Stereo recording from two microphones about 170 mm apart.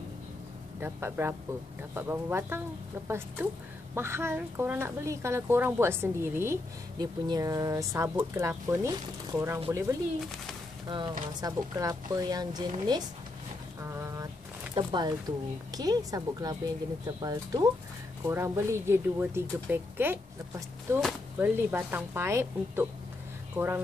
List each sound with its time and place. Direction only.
0.7 s a woman's voice: 10° right (ahead or behind)
3.9 s a woman's voice: 15° right (ahead or behind)
13.7 s vehicle: 15° right (ahead or behind)
14.8 s a woman's voice: 25° right (ahead or behind)